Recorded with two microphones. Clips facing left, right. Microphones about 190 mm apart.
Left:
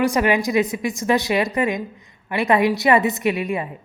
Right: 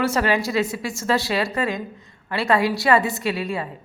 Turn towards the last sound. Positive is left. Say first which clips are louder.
# left 3 dB
turn(degrees=20)  # may be behind; listen again after turning